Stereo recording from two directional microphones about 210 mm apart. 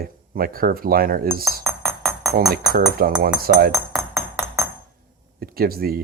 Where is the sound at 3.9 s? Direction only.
Centre (ahead or behind).